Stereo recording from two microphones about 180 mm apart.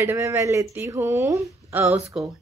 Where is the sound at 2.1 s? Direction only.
5° right (ahead or behind).